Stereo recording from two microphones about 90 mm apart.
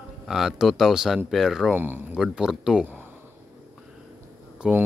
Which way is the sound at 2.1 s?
5° right (ahead or behind).